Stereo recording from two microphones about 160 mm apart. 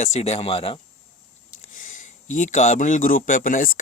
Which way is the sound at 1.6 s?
55° left (ahead or behind).